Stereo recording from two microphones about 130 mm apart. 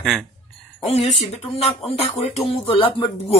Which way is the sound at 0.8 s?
55° left (ahead or behind).